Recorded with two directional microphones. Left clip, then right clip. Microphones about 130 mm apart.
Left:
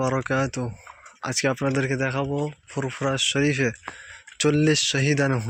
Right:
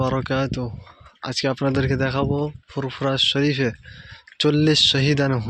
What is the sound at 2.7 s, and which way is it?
Speech, 20° right (ahead or behind).